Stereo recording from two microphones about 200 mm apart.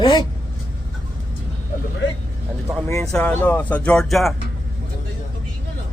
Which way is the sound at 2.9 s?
15° left (ahead or behind).